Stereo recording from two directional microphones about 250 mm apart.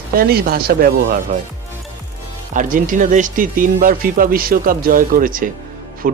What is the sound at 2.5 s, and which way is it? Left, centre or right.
Speech, right.